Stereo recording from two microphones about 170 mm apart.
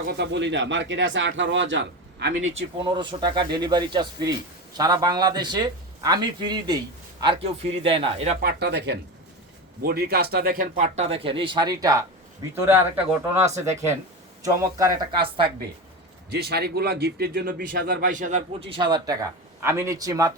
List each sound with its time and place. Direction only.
0.1 s speech: 90° right
2.4 s a man's voice: 35° right (ahead or behind)
8.4 s a man's voice: 70° right (ahead or behind)
9.8 s speech: 65° right (ahead or behind)
10.8 s a man's voice: 40° right (ahead or behind)
16.3 s a man's voice: 70° right (ahead or behind); by 18.4 s 45° right (ahead or behind)
18.7 s a man's voice: 25° right (ahead or behind)